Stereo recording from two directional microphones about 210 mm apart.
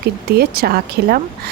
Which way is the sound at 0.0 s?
45° right (ahead or behind).